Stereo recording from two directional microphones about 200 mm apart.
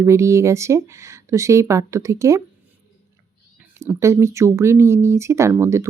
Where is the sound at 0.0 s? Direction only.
15° right (ahead or behind).